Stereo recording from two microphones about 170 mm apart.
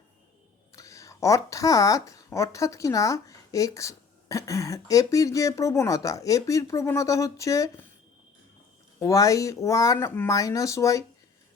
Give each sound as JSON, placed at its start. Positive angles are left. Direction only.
{"t": 0.7, "sound": "speech", "side_deg": 20}
{"t": 9.0, "sound": "speech", "side_deg": 20}